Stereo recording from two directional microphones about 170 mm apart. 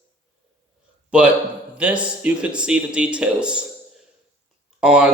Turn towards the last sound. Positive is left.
turn(degrees=-5)  # may be behind; listen again after turning